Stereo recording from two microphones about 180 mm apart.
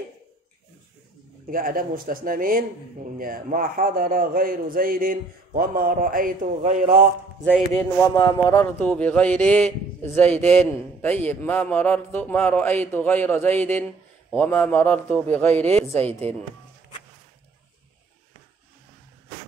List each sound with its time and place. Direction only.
1.5 s a man's voice: 50° right (ahead or behind)
7.4 s speech: centre (ahead or behind)
8.0 s speech: 20° left (ahead or behind)